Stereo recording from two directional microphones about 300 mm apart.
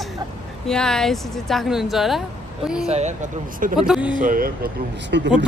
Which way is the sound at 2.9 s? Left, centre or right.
Right.